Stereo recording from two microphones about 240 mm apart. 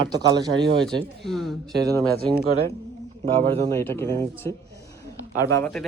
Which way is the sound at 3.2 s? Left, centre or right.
Right.